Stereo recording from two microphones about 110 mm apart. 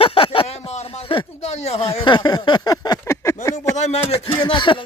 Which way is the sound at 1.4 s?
80° left.